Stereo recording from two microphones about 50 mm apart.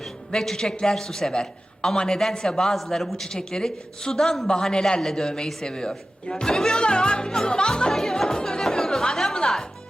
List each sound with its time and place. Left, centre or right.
0.3 s a man's voice: centre